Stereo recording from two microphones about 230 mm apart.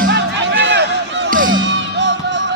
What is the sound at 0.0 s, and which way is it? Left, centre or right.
Music, right.